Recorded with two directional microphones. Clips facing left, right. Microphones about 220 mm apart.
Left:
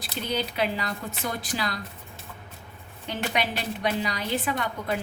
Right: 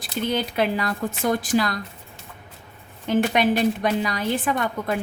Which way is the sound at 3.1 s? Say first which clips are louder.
Right 9 dB; 50° right (ahead or behind).